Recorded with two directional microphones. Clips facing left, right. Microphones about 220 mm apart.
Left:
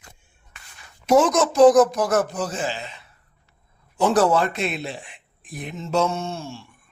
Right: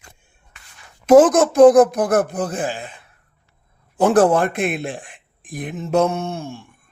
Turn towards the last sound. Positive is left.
turn(degrees=-55)  # may be behind; listen again after turning